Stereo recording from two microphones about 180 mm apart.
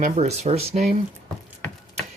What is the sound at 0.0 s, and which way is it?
Speech, 40° right (ahead or behind).